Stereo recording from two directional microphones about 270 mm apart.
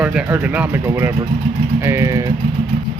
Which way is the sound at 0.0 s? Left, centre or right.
Centre.